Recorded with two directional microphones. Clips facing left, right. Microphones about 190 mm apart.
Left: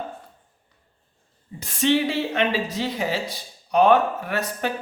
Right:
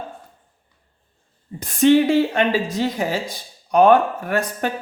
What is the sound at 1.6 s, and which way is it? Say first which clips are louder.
Speech: right 7 dB; 50° right (ahead or behind).